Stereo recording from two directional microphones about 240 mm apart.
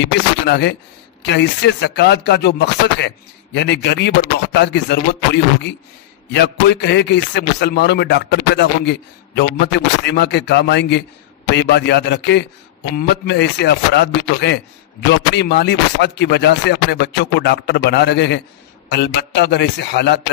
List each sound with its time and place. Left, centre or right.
0.0 s speech: left